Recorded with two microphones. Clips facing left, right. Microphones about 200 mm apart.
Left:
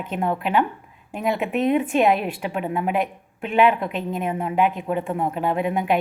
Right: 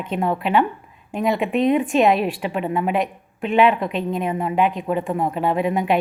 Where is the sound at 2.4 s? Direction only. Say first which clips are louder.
Right 2 dB; 5° left (ahead or behind).